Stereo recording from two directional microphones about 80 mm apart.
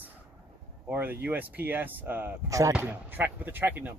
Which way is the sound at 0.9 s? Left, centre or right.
Right.